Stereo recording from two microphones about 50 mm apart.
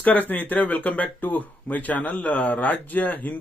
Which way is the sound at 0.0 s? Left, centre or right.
Left.